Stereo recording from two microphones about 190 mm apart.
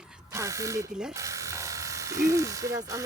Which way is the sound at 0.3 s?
15° right (ahead or behind).